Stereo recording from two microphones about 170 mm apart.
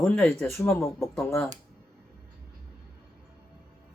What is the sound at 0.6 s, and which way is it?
Speech, 15° left (ahead or behind).